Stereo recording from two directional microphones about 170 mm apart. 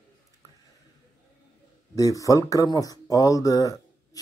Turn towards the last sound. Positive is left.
turn(degrees=20)  # may be behind; listen again after turning